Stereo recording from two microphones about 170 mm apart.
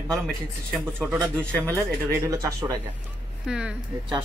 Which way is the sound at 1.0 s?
5° right (ahead or behind).